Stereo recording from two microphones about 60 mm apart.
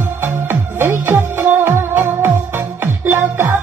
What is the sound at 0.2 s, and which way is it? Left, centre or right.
Music, right.